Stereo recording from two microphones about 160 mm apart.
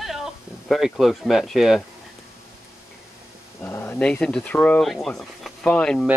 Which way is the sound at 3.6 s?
15° left (ahead or behind).